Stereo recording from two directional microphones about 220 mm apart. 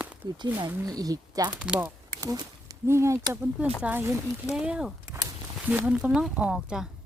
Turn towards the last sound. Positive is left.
turn(degrees=-5)  # may be behind; listen again after turning